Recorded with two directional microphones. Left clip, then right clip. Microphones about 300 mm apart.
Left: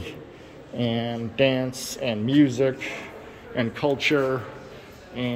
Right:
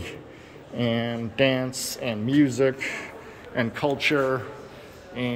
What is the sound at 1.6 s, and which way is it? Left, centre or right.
Speech, right.